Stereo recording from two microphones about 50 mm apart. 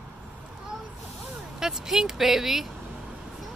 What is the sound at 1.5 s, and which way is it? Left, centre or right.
Vehicle, centre.